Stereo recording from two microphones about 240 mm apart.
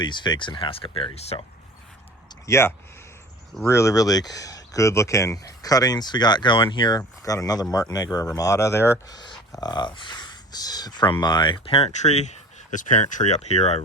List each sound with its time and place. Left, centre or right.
0.0 s speech: centre
2.5 s speech: centre; by 13.8 s left